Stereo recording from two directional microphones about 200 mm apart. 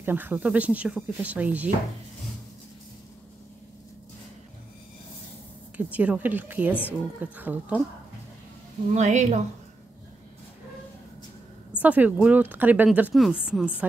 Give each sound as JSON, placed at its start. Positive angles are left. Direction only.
{"t": 0.0, "sound": "a woman's voice", "side_deg": -10}
{"t": 5.8, "sound": "a woman's voice", "side_deg": -5}
{"t": 6.7, "sound": "speech", "side_deg": 10}
{"t": 7.2, "sound": "a woman's voice", "side_deg": -10}
{"t": 8.9, "sound": "a woman's voice", "side_deg": -35}
{"t": 11.8, "sound": "a woman's voice", "side_deg": -5}